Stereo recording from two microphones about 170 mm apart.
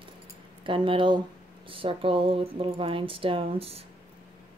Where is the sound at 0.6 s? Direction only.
30° right (ahead or behind).